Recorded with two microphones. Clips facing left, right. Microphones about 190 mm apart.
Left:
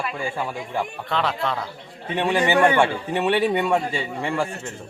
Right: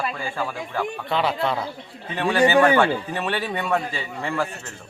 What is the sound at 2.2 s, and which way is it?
A man's voice, 15° left (ahead or behind).